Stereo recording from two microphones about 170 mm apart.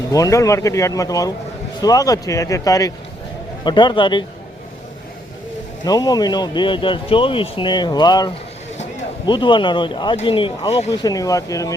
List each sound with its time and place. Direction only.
0.1 s speech: 20° left (ahead or behind)
5.8 s speech: 25° left (ahead or behind)